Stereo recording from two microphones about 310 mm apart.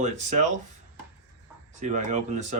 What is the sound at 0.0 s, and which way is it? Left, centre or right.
Speech, right.